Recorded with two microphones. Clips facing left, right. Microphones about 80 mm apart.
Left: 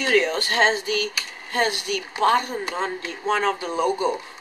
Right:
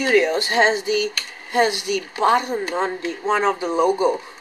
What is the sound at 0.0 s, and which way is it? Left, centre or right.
Speech, centre.